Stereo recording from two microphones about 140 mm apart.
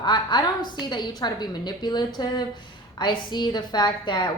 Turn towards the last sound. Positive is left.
turn(degrees=30)  # may be behind; listen again after turning